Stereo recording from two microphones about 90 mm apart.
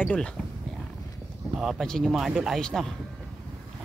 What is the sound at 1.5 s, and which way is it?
Mantra, centre (ahead or behind).